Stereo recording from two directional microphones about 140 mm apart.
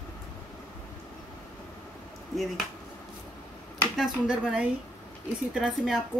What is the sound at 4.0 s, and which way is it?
Speech, 5° right (ahead or behind).